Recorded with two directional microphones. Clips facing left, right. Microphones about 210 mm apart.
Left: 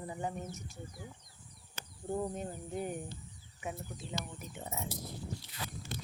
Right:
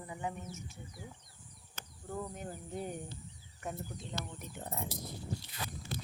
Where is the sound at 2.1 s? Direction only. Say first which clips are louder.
Left 5 dB; 25° left (ahead or behind).